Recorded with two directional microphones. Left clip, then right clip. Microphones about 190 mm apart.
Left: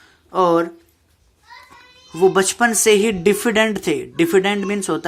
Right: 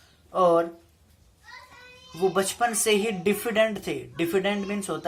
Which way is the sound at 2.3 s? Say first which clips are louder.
Left 8 dB; 35° left (ahead or behind).